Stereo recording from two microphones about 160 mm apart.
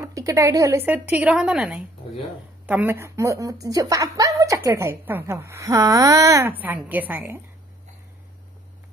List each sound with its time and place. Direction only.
0.0 s speech: 20° right (ahead or behind)
0.8 s a woman's voice: 10° right (ahead or behind)